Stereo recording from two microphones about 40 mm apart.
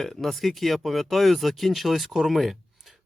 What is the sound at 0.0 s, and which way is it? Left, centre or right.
Speech, centre.